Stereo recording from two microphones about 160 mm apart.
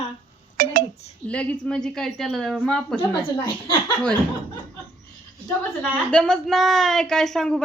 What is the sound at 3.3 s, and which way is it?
Speech, 30° left (ahead or behind).